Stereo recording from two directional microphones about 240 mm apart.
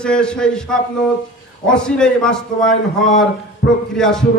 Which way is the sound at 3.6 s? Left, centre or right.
Left.